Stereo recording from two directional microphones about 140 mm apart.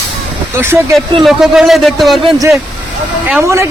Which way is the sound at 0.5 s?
15° right (ahead or behind).